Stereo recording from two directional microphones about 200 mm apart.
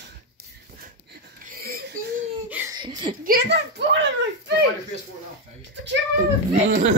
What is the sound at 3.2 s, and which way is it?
A child's voice, 50° right (ahead or behind).